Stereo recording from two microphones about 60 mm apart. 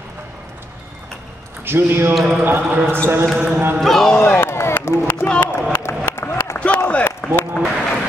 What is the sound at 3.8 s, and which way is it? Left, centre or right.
Speech, centre.